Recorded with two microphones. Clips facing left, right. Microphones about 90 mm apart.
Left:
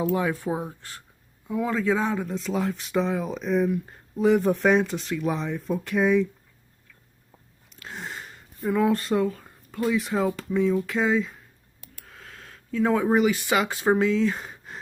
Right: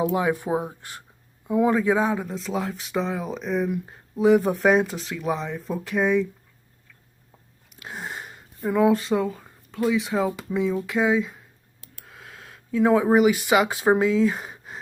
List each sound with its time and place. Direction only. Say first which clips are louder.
0.1 s speech: right 2 dB; 15° right (ahead or behind); by 6.2 s centre (ahead or behind)
7.7 s sniff: right 2 dB; 10° right (ahead or behind)
8.2 s speech: right 2 dB; 5° right (ahead or behind)
12.1 s a sound: right 1 dB; 10° right (ahead or behind)
13.0 s speech: right 3 dB; 10° right (ahead or behind)